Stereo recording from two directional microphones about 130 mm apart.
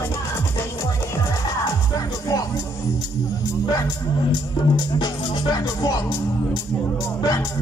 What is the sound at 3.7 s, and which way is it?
Music, 30° left (ahead or behind).